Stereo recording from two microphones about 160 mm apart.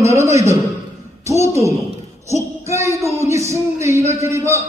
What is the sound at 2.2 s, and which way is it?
Child singing, 15° right (ahead or behind).